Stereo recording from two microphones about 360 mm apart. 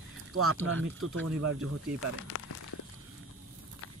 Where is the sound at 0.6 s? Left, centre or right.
Right.